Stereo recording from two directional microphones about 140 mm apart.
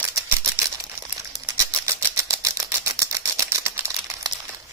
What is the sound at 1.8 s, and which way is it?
Typewriter, 25° right (ahead or behind).